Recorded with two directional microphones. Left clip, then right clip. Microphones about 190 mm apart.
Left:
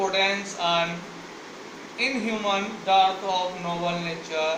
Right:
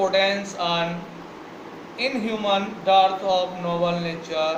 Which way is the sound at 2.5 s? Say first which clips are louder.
Right 4 dB; 20° right (ahead or behind).